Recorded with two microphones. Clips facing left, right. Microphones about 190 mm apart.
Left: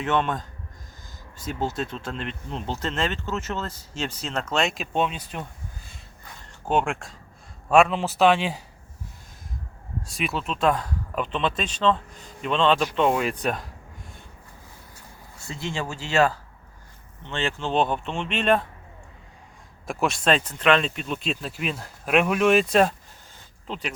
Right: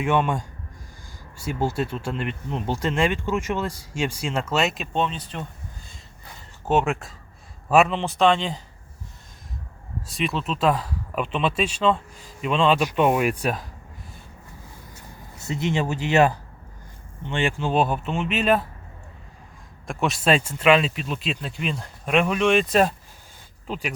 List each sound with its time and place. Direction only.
0.0 s speech: 10° right (ahead or behind); by 5.5 s 10° left (ahead or behind)
6.7 s speech: 5° right (ahead or behind)
10.1 s speech: centre (ahead or behind)
15.4 s speech: 20° right (ahead or behind); by 18.6 s 5° right (ahead or behind)
19.9 s speech: centre (ahead or behind)